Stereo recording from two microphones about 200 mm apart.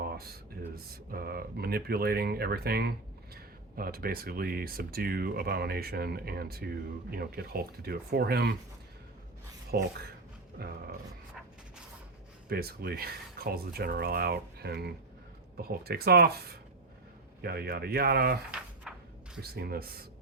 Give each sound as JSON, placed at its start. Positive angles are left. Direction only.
{"t": 0.0, "sound": "a sound", "side_deg": -50}
{"t": 1.1, "sound": "speech", "side_deg": -50}
{"t": 9.7, "sound": "speech", "side_deg": -50}
{"t": 12.5, "sound": "speech", "side_deg": -50}
{"t": 18.9, "sound": "a sound", "side_deg": -5}
{"t": 19.4, "sound": "speech", "side_deg": -50}